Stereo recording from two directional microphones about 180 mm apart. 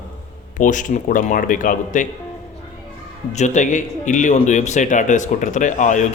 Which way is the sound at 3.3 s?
40° left (ahead or behind).